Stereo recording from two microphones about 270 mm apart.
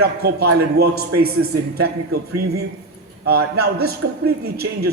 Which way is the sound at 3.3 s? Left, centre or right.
Right.